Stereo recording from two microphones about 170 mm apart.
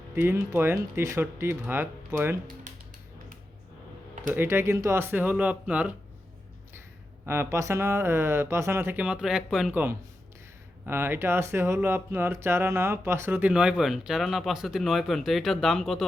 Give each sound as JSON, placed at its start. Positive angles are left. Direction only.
{"t": 0.2, "sound": "speech", "side_deg": -10}
{"t": 2.7, "sound": "music", "side_deg": -50}
{"t": 4.4, "sound": "speech", "side_deg": -15}
{"t": 7.3, "sound": "speech", "side_deg": -15}
{"t": 10.8, "sound": "speech", "side_deg": -15}